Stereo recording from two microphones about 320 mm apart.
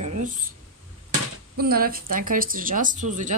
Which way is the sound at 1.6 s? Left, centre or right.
Right.